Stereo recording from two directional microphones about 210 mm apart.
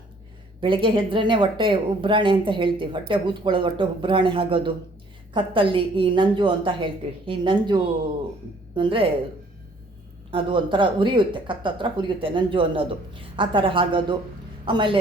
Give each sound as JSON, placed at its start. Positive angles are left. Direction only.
{"t": 0.6, "sound": "speech", "side_deg": -25}
{"t": 10.3, "sound": "a man's voice", "side_deg": -25}